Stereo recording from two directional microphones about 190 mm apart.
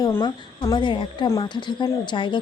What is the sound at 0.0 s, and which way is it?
Speech, 20° left (ahead or behind).